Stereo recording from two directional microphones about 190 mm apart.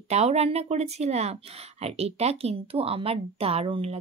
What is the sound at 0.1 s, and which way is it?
Speech, 35° right (ahead or behind).